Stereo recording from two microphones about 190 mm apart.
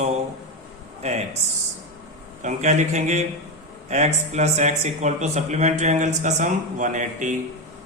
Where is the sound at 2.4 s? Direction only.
40° right (ahead or behind).